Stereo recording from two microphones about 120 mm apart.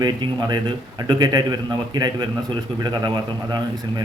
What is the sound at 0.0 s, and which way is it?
A man's voice, 35° right (ahead or behind).